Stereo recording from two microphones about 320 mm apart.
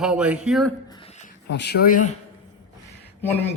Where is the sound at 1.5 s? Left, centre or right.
Left.